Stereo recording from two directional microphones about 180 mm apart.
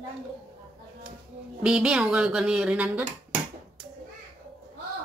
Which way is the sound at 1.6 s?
5° right (ahead or behind).